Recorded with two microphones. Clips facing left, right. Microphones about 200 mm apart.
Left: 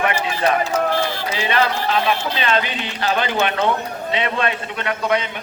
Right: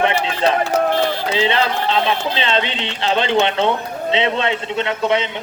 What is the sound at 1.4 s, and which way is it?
Speech, 25° right (ahead or behind).